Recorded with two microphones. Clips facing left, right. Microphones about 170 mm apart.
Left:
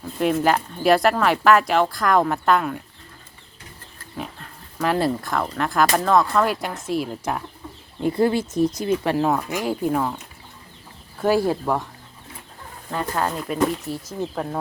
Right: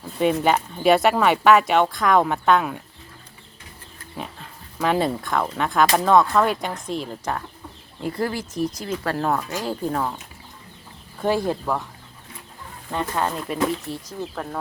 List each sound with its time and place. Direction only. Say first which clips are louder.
0.2 s speech: even; centre (ahead or behind)
4.2 s speech: left 1 dB; centre (ahead or behind)
8.0 s speech: left 6 dB; 25° left (ahead or behind)
9.1 s speech: left 3 dB; 5° left (ahead or behind)
11.2 s speech: left 3 dB; 5° left (ahead or behind)
12.9 s speech: even; centre (ahead or behind)